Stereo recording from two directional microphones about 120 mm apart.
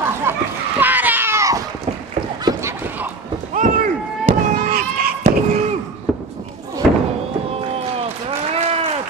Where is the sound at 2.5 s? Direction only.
25° right (ahead or behind).